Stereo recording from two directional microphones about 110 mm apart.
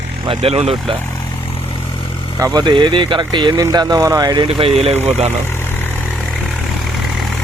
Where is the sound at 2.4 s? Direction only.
40° right (ahead or behind).